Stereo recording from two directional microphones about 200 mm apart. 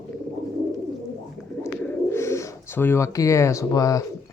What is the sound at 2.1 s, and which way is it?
Speech, 15° left (ahead or behind).